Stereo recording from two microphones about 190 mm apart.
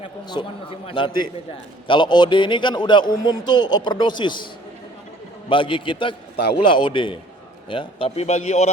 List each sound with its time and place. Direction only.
0.0 s a man's voice: 25° left (ahead or behind)
5.5 s a man's voice: 25° left (ahead or behind)